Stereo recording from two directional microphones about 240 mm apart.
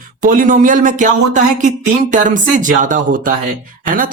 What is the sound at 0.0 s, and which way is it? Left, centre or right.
Speech, right.